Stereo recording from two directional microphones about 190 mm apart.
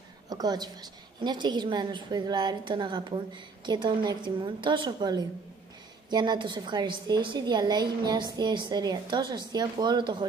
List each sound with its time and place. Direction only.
0.3 s a woman's voice: 20° right (ahead or behind)